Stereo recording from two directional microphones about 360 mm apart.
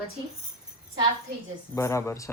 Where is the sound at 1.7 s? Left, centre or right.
Centre.